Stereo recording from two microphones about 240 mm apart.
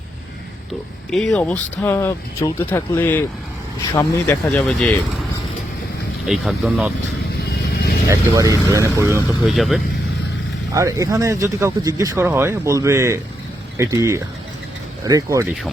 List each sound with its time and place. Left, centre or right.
1.1 s speech: centre
6.2 s speech: centre
7.5 s vehicle: left
8.0 s speech: centre
9.4 s speech: centre
10.8 s speech: centre